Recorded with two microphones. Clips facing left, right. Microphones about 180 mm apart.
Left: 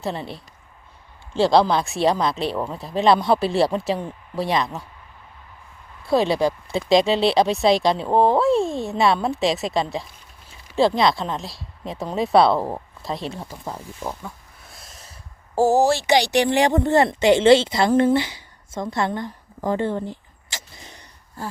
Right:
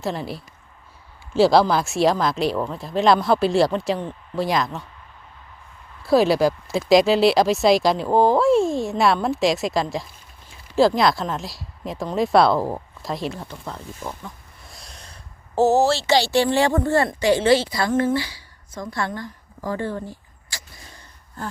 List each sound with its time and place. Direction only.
0.0 s speech: centre (ahead or behind)
6.1 s speech: 5° right (ahead or behind); by 21.0 s 20° left (ahead or behind)